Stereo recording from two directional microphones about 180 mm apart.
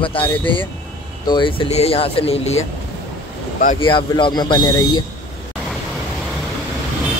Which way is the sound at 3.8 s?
25° left (ahead or behind).